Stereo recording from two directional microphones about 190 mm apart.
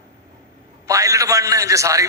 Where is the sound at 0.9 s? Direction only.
15° right (ahead or behind).